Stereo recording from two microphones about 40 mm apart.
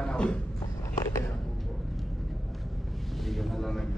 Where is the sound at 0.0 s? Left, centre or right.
Left.